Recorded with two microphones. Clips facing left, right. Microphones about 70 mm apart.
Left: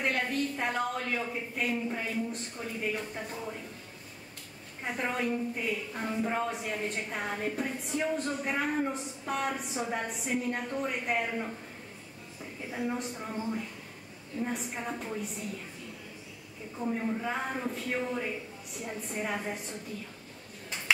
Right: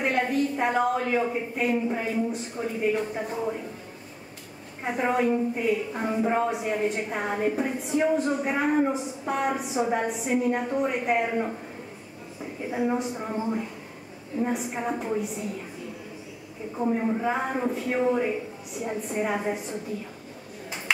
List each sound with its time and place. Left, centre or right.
0.0 s a woman's voice: centre
4.8 s a woman's voice: centre
12.6 s a woman's voice: centre
14.5 s a woman's voice: centre
14.8 s a woman's voice: centre
16.7 s a woman's voice: right; by 19.8 s centre